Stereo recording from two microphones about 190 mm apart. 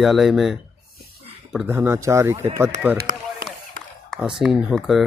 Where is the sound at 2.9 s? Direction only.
50° right (ahead or behind).